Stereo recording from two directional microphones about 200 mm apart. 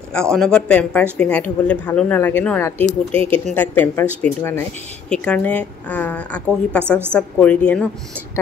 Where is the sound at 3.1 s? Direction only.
30° right (ahead or behind).